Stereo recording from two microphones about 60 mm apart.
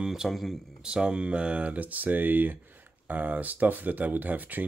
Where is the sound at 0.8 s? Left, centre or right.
Centre.